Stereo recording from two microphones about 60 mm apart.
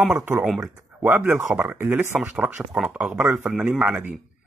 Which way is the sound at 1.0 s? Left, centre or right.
Right.